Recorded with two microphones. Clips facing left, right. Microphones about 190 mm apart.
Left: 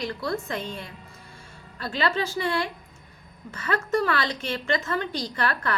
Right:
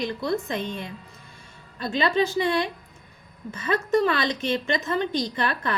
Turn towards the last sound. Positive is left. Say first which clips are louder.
# right 1 dB
turn(degrees=-20)  # may be behind; listen again after turning